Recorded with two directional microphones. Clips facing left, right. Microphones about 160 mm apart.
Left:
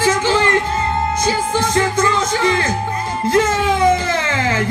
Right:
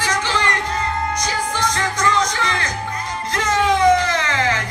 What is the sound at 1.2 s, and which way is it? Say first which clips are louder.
Speech: left 4 dB; 25° left (ahead or behind).